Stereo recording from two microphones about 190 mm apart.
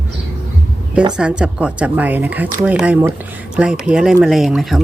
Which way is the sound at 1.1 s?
5° right (ahead or behind).